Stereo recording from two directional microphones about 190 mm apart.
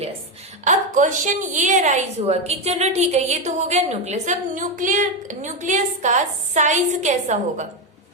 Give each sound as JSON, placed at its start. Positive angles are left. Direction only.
{"t": 0.6, "sound": "a woman's voice", "side_deg": -40}